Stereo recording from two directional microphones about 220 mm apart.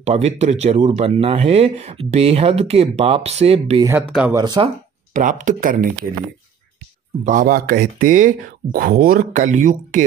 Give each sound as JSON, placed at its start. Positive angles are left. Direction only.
{"t": 0.0, "sound": "speech", "side_deg": -30}
{"t": 4.1, "sound": "speech", "side_deg": -5}
{"t": 4.4, "sound": "speech", "side_deg": -20}
{"t": 5.1, "sound": "speech", "side_deg": -35}
{"t": 7.2, "sound": "speech", "side_deg": -40}